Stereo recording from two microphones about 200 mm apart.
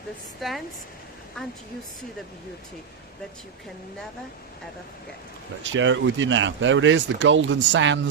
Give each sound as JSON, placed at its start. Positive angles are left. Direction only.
{"t": 0.3, "sound": "a woman's voice", "side_deg": 0}
{"t": 5.6, "sound": "speech", "side_deg": -70}